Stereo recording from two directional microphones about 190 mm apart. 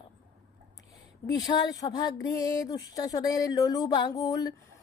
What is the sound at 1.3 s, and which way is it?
Speech, 20° left (ahead or behind).